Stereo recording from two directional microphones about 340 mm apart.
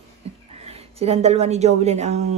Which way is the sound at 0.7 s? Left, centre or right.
Centre.